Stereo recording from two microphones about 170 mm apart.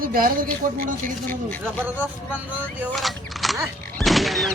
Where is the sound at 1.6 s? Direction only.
10° right (ahead or behind).